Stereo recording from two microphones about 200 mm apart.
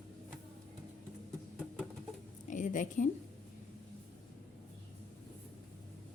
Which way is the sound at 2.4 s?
40° left (ahead or behind).